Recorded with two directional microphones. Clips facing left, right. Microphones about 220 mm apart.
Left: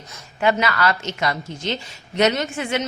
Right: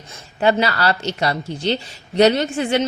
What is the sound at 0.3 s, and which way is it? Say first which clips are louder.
Speech: right 2 dB; 35° right (ahead or behind).